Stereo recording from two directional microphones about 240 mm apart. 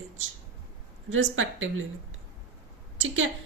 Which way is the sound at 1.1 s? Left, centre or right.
Right.